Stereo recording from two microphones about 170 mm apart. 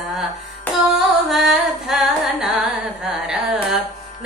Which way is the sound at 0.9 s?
Centre (ahead or behind).